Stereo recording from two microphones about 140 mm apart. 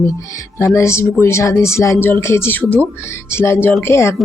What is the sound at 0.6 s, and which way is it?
Speech, 20° left (ahead or behind).